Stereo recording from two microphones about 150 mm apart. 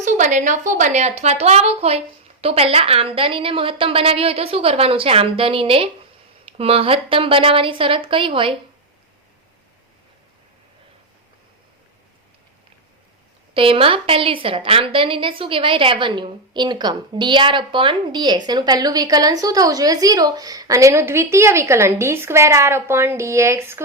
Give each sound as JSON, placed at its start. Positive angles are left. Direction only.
{"t": 0.0, "sound": "a woman's voice", "side_deg": -55}
{"t": 13.5, "sound": "a woman's voice", "side_deg": -35}